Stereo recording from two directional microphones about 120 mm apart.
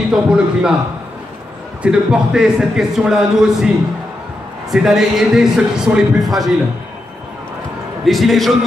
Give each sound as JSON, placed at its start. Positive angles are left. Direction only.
{"t": 0.1, "sound": "a man's voice", "side_deg": -5}
{"t": 1.8, "sound": "a man's voice", "side_deg": -5}
{"t": 8.0, "sound": "a man's voice", "side_deg": 0}